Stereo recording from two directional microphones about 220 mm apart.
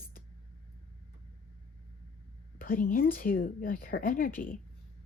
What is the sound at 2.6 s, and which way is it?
A woman's voice, 40° left (ahead or behind).